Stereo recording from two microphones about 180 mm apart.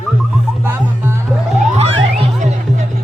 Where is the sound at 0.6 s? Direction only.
10° right (ahead or behind).